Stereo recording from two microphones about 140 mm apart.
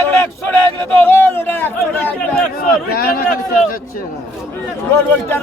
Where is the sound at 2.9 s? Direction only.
90° left.